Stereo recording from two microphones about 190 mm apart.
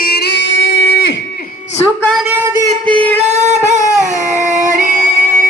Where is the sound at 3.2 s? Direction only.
35° right (ahead or behind).